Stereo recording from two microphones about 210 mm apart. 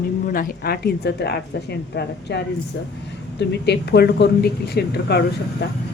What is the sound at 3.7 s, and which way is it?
A woman's voice, 50° left (ahead or behind).